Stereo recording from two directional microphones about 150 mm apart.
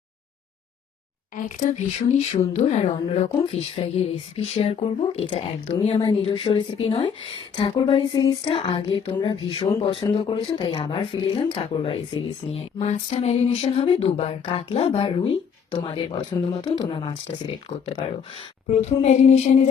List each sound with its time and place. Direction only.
1.5 s a woman's voice: 60° left (ahead or behind); by 17.2 s 30° left (ahead or behind)
18.7 s a woman's voice: 50° left (ahead or behind)